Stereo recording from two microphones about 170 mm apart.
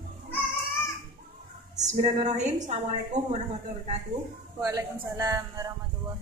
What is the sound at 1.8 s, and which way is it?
Speech, 45° right (ahead or behind).